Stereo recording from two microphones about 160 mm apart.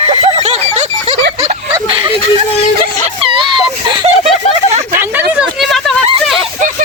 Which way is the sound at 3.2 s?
30° right (ahead or behind).